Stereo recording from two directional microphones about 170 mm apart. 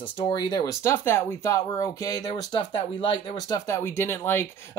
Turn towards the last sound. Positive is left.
turn(degrees=10)  # may be behind; listen again after turning